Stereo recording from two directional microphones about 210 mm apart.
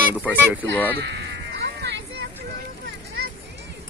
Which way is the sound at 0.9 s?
50° right (ahead or behind).